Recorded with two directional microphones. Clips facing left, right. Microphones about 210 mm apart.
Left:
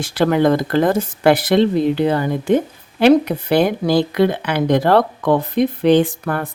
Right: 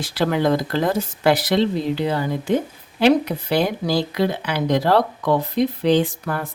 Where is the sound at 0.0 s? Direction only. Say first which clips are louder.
Left 5 dB; 50° left (ahead or behind).